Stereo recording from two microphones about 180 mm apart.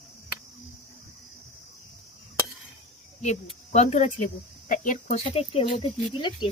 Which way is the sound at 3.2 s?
40° left (ahead or behind).